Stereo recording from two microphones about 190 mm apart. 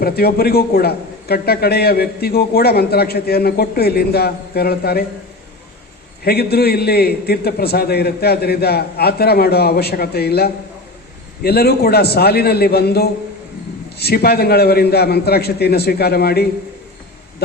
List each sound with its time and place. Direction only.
0.0 s a man's voice: 55° left (ahead or behind)
6.2 s a man's voice: 55° left (ahead or behind)